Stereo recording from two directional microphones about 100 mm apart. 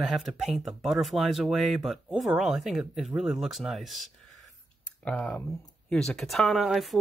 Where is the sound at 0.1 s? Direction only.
Centre (ahead or behind).